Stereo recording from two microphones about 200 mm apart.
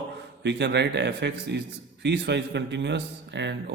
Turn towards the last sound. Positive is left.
turn(degrees=-60)  # may be behind; listen again after turning